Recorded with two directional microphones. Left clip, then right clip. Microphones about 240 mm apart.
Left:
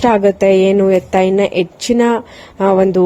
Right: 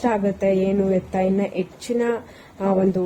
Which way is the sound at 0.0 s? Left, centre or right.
Left.